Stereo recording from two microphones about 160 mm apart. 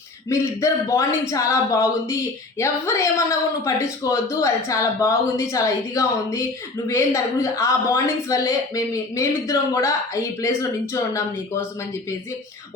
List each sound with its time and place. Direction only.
0.3 s speech: 20° left (ahead or behind)